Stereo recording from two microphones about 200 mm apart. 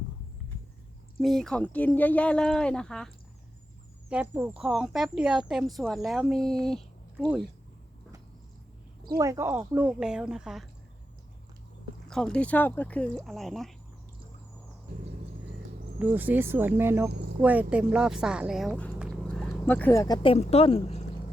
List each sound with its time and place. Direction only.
1.2 s speech: centre (ahead or behind)
4.1 s speech: 10° right (ahead or behind)
9.1 s speech: 15° right (ahead or behind)
12.0 s speech: 5° left (ahead or behind)
16.0 s speech: 10° right (ahead or behind); by 20.1 s 15° left (ahead or behind)
20.2 s a woman's voice: 30° left (ahead or behind)